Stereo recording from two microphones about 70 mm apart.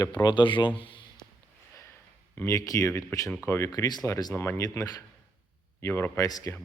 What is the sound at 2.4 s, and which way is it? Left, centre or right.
Speech, left.